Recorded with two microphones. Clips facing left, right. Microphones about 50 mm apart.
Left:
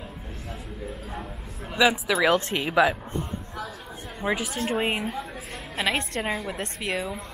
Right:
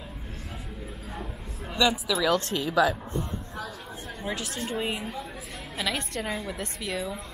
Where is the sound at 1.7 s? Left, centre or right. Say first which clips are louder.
Left 3 dB; centre.